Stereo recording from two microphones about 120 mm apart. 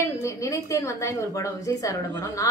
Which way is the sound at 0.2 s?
25° left (ahead or behind).